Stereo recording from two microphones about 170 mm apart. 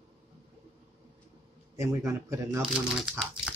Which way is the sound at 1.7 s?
15° right (ahead or behind).